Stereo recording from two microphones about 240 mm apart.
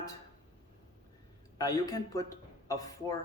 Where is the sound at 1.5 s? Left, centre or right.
Centre.